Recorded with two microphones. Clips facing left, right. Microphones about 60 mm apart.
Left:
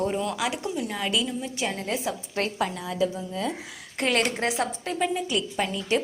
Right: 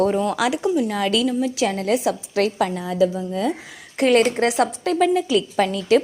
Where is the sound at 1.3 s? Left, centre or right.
Right.